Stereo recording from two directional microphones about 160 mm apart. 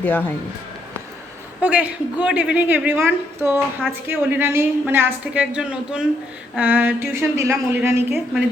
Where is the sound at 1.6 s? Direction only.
10° right (ahead or behind).